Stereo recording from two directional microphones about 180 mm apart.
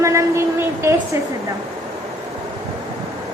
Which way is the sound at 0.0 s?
15° right (ahead or behind).